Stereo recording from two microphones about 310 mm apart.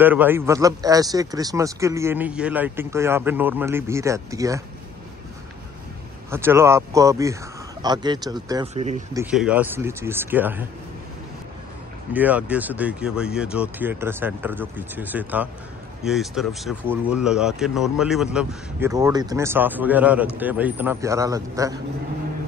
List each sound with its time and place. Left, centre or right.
0.0 s a man's voice: centre
6.3 s a man's voice: centre
9.2 s speech: centre
12.1 s a man's voice: centre